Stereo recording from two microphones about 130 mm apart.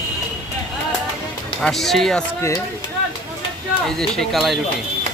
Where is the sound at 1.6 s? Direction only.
Centre (ahead or behind).